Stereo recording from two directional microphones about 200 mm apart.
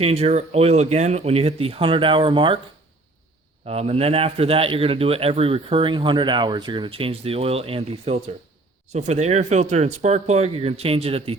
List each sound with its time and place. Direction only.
0.0 s speech: 30° right (ahead or behind)
3.7 s a man's voice: 30° right (ahead or behind)